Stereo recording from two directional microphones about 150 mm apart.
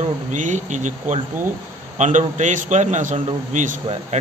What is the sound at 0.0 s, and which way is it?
A man's voice, 55° right (ahead or behind).